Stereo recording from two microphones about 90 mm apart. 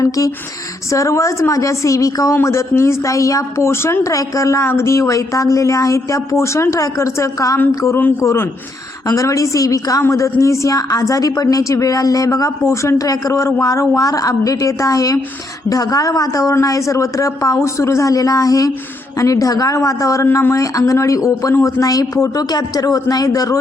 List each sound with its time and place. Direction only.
0.9 s a man's voice: 35° left (ahead or behind)